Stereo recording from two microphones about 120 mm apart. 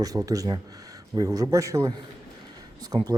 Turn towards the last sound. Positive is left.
turn(degrees=-40)  # may be behind; listen again after turning